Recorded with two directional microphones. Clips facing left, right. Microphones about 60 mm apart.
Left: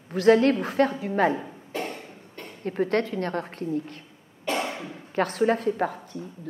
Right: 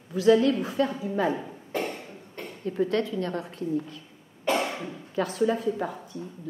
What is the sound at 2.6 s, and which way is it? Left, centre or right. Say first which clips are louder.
A woman's voice: left 1 dB; left.